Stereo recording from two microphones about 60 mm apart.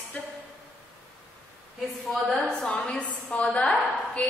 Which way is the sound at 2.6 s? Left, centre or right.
Centre.